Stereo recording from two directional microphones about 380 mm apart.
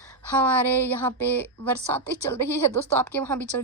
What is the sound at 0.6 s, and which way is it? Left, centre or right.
Speech, centre.